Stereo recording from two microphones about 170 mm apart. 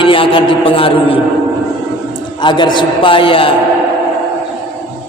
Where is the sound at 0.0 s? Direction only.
30° left (ahead or behind).